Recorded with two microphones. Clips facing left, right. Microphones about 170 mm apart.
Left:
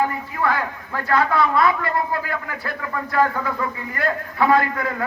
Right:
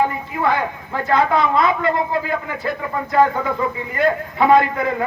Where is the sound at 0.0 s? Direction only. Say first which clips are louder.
Right 3 dB; 20° right (ahead or behind).